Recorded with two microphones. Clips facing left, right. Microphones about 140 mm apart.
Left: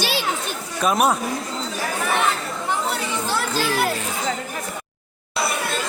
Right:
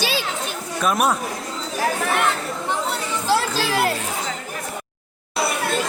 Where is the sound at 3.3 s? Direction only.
90° right.